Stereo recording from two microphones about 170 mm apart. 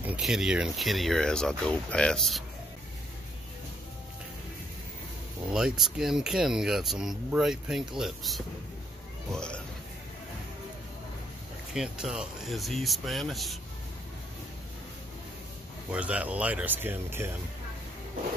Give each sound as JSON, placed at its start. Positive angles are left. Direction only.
{"t": 0.0, "sound": "speech", "side_deg": -5}
{"t": 5.5, "sound": "speech", "side_deg": -5}
{"t": 11.7, "sound": "speech", "side_deg": -5}
{"t": 15.9, "sound": "speech", "side_deg": -10}